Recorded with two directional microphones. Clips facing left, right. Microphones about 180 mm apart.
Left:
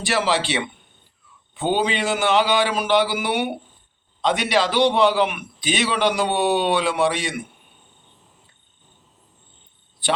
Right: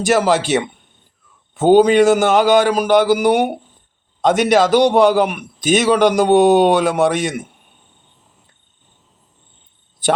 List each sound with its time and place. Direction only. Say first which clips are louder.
0.0 s a man's voice: right 7 dB; 45° right (ahead or behind)